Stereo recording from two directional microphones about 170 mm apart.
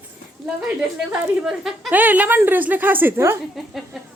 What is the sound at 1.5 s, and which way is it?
A woman's voice, 5° right (ahead or behind).